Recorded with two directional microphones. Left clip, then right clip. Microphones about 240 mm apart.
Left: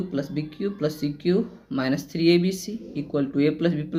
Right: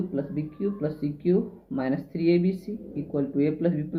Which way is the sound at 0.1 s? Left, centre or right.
Left.